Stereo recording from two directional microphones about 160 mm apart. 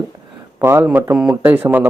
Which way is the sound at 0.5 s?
15° right (ahead or behind).